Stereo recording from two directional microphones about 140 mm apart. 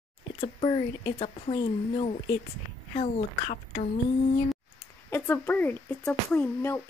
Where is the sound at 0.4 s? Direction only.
40° left (ahead or behind).